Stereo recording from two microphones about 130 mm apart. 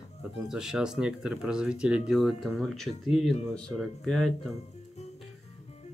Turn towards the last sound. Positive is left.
turn(degrees=5)  # may be behind; listen again after turning